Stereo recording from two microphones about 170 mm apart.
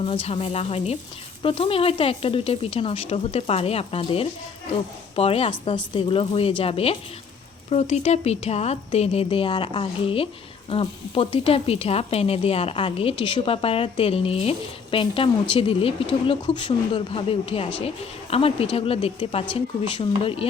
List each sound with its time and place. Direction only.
0.0 s speech: 35° left (ahead or behind)